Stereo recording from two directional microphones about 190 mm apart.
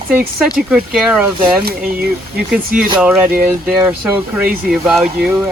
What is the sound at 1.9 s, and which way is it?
Speech, 55° right (ahead or behind).